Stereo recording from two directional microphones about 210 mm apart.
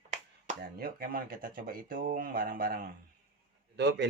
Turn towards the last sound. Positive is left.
turn(degrees=-55)  # may be behind; listen again after turning